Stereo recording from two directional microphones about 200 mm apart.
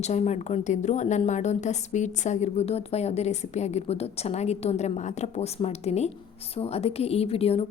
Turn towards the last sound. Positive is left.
turn(degrees=30)  # may be behind; listen again after turning